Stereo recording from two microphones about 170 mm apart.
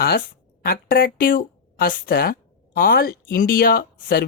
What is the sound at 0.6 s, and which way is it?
Speech, 60° left (ahead or behind).